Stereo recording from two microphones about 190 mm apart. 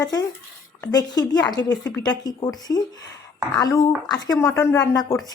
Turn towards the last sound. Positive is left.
turn(degrees=15)  # may be behind; listen again after turning